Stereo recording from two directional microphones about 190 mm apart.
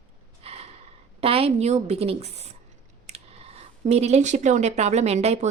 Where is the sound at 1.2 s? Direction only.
30° right (ahead or behind).